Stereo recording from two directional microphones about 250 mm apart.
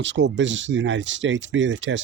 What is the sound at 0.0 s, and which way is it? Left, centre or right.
Speech, right.